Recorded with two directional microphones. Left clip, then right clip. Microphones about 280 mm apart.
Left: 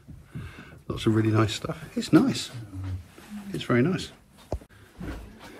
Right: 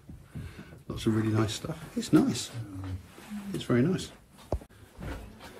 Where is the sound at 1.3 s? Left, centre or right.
Centre.